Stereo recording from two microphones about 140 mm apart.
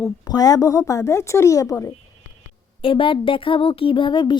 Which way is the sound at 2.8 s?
40° left (ahead or behind).